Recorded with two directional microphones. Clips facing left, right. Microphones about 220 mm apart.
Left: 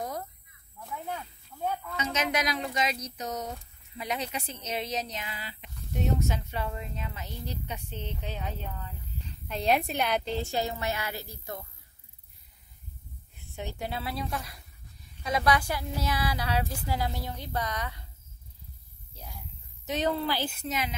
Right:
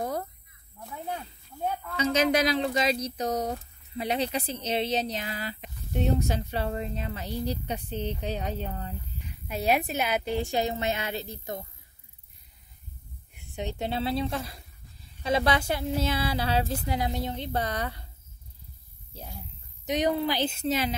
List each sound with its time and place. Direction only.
2.0 s speech: 30° right (ahead or behind)
5.9 s speech: 30° right (ahead or behind)
9.2 s a woman's voice: 10° right (ahead or behind)
13.3 s speech: 15° right (ahead or behind); by 18.0 s 35° right (ahead or behind)
19.1 s speech: 25° right (ahead or behind)
19.9 s speech: 15° right (ahead or behind); by 20.9 s 30° right (ahead or behind)